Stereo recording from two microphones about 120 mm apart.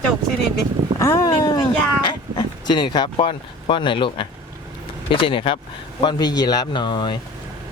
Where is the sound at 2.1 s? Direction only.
40° left (ahead or behind).